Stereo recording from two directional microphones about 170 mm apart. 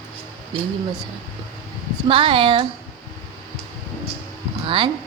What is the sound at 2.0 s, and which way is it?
Speech, 30° right (ahead or behind).